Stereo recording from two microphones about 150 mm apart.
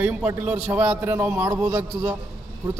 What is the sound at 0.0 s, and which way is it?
A man's voice, 10° right (ahead or behind).